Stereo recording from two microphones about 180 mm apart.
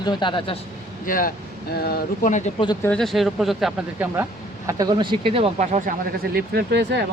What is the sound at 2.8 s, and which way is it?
Speech, 5° left (ahead or behind).